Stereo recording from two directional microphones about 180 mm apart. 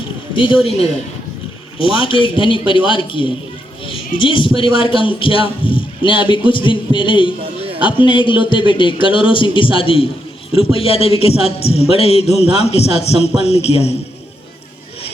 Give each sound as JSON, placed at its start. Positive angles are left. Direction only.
{"t": 0.6, "sound": "a man's voice", "side_deg": 35}